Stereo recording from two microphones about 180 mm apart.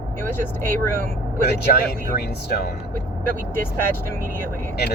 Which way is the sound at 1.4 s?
60° left (ahead or behind).